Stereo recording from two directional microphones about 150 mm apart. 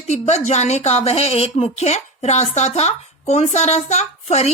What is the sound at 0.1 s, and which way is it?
A woman's voice, 50° left (ahead or behind).